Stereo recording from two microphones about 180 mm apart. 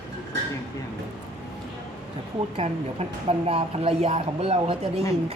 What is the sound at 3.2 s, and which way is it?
Speech, 35° right (ahead or behind).